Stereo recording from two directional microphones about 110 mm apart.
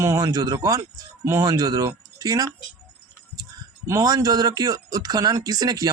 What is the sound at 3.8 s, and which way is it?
Speech, 35° right (ahead or behind).